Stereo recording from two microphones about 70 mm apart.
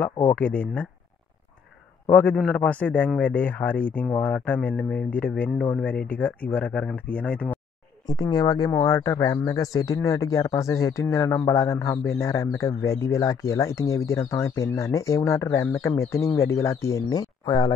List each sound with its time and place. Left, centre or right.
0.3 s speech: centre
2.0 s a man's voice: left
2.3 s speech: centre
8.1 s speech: left
8.8 s speech: left